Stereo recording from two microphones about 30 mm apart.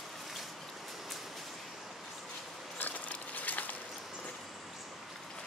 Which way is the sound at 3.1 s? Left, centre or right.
Left.